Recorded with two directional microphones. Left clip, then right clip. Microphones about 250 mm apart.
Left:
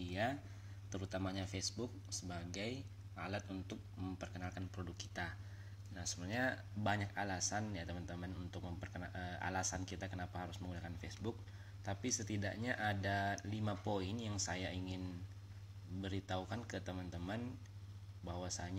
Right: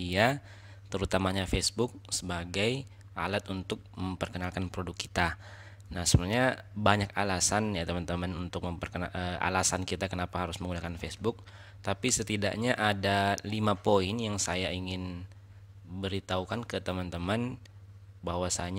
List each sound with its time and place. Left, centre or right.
0.0 s speech: right